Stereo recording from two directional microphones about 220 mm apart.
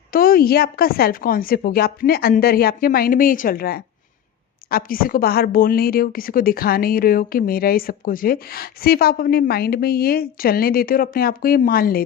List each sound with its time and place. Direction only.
0.1 s a woman's voice: 40° left (ahead or behind)